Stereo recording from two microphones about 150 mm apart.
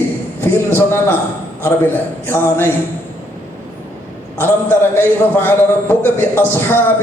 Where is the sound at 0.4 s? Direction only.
15° left (ahead or behind).